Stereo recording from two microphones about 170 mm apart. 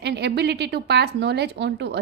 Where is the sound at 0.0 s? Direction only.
80° right.